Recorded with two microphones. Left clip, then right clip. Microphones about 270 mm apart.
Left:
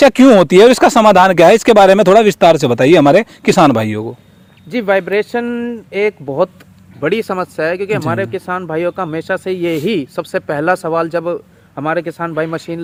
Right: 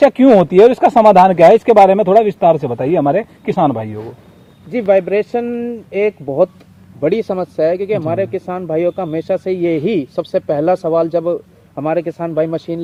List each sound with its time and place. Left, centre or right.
0.0 s speech: left
4.7 s speech: centre